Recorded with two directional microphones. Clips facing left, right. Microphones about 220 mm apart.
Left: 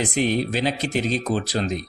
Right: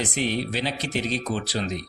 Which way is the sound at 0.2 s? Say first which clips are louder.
Left 5 dB; 45° left (ahead or behind).